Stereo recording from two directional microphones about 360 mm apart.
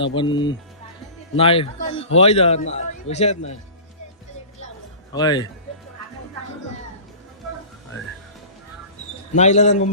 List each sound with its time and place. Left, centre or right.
0.0 s a man's voice: centre
5.1 s a man's voice: centre
9.3 s a man's voice: centre